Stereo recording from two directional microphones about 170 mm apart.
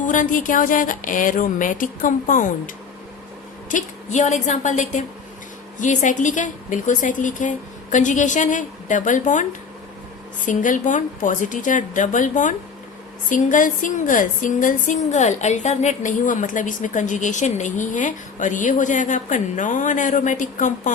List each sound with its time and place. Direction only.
0.0 s a woman's voice: 50° left (ahead or behind)
3.7 s a woman's voice: 45° left (ahead or behind)